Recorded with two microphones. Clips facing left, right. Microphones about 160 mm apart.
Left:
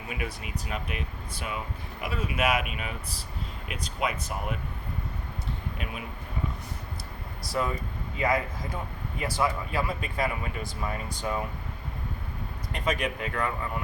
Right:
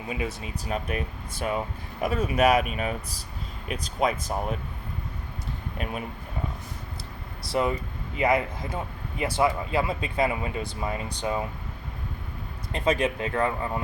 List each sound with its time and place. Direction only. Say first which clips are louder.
0.1 s speech: right 4 dB; 25° right (ahead or behind)
0.7 s speech: right 7 dB; 40° right (ahead or behind)
7.4 s speech: right 4 dB; 25° right (ahead or behind)
12.7 s speech: right 5 dB; 30° right (ahead or behind)